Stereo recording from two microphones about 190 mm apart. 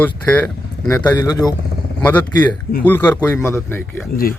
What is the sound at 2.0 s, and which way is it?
Speech, 10° left (ahead or behind).